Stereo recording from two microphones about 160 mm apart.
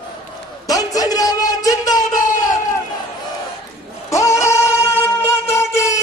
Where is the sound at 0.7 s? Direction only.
25° left (ahead or behind).